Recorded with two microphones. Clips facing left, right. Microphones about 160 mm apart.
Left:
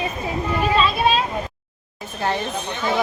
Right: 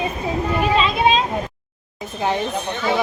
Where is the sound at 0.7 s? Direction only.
20° right (ahead or behind).